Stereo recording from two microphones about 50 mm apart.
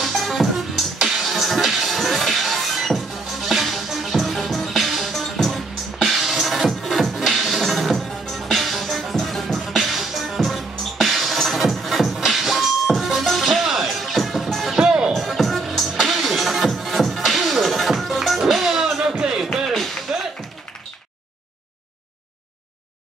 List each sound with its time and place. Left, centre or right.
0.0 s music: centre
14.8 s music: centre
15.1 s music: centre
19.4 s music: centre